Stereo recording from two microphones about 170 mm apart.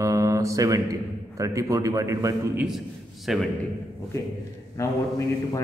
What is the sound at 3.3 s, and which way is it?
Speech, centre (ahead or behind).